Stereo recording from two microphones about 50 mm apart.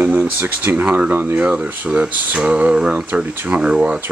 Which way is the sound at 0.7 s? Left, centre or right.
Right.